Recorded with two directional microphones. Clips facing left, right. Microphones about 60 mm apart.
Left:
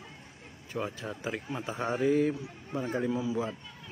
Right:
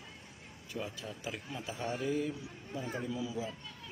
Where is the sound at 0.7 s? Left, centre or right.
Left.